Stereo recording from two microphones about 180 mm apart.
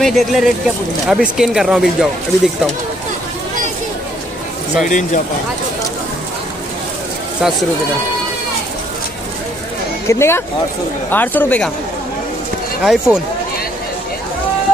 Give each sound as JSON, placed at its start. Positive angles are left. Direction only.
{"t": 0.0, "sound": "speech", "side_deg": 0}
{"t": 4.8, "sound": "speech", "side_deg": 45}
{"t": 10.0, "sound": "speech", "side_deg": 15}
{"t": 12.8, "sound": "speech", "side_deg": 0}